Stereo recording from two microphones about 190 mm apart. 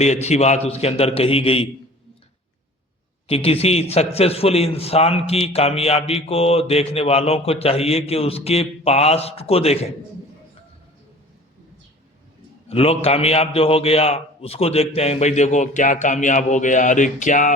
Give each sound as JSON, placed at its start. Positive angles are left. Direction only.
{"t": 0.0, "sound": "a man's voice", "side_deg": 35}
{"t": 3.2, "sound": "a man's voice", "side_deg": 30}
{"t": 12.6, "sound": "a man's voice", "side_deg": 30}